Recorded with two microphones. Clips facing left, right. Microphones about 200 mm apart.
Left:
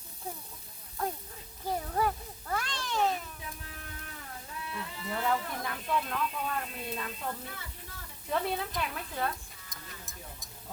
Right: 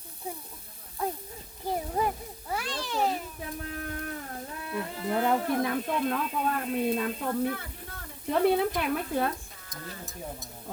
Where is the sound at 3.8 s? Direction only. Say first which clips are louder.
Right 12 dB; 50° right (ahead or behind).